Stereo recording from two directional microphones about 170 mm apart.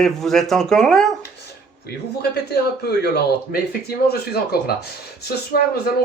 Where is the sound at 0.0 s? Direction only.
Centre (ahead or behind).